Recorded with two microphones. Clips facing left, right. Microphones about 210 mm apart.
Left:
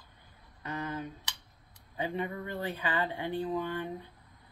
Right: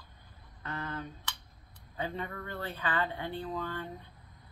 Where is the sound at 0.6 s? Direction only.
15° left (ahead or behind).